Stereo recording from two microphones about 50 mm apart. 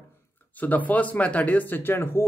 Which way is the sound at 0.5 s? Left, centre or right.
Left.